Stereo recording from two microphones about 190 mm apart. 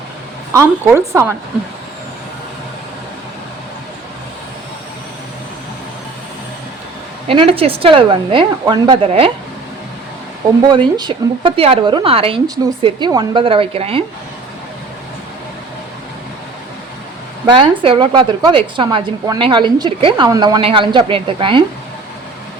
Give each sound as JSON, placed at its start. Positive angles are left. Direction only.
{"t": 0.5, "sound": "a woman's voice", "side_deg": -15}
{"t": 7.3, "sound": "a woman's voice", "side_deg": -30}
{"t": 10.7, "sound": "a woman's voice", "side_deg": -20}
{"t": 17.4, "sound": "a woman's voice", "side_deg": -25}